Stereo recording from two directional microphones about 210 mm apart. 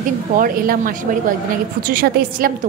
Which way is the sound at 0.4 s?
45° right (ahead or behind).